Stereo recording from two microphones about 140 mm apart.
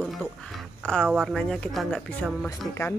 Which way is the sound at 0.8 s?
5° left (ahead or behind).